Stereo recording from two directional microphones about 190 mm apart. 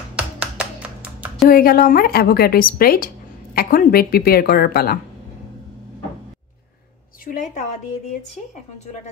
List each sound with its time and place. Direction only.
0.6 s music: 5° right (ahead or behind)
1.5 s a woman's voice: 50° left (ahead or behind)
7.2 s a woman's voice: 45° left (ahead or behind)
8.7 s a woman's voice: 35° left (ahead or behind)